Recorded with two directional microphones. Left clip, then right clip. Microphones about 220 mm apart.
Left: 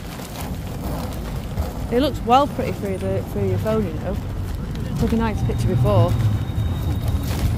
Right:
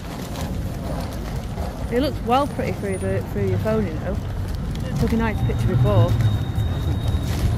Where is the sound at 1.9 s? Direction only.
20° left (ahead or behind).